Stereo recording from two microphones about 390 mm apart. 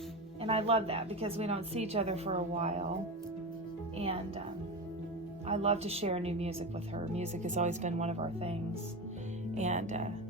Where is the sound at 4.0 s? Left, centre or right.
Centre.